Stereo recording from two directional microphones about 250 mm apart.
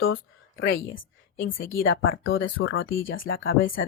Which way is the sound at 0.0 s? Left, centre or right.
Left.